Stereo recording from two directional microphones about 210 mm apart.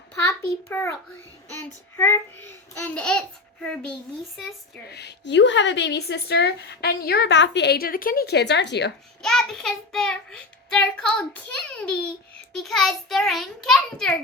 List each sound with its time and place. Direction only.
0.1 s a sound: 15° left (ahead or behind)
1.5 s a child's voice: 10° left (ahead or behind)
4.9 s a woman's voice: 55° left (ahead or behind)
9.2 s a child's voice: centre (ahead or behind)